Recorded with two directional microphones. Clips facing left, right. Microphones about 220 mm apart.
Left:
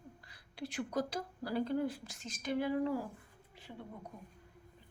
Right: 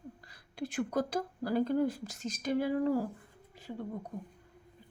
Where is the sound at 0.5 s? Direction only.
50° right (ahead or behind).